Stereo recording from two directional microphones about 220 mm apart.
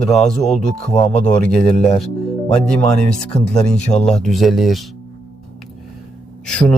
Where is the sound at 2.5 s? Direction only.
5° left (ahead or behind).